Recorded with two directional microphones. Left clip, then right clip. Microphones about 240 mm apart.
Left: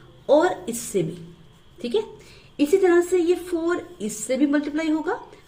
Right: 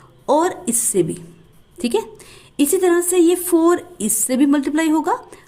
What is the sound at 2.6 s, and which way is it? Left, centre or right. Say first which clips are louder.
A woman's voice: right 2 dB; right.